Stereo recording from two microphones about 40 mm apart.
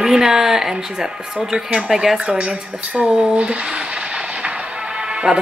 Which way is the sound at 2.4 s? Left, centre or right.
Right.